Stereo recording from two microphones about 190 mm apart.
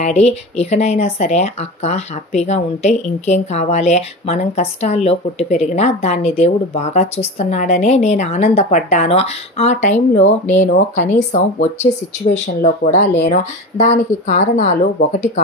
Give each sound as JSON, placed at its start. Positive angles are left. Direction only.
{"t": 0.0, "sound": "speech", "side_deg": 35}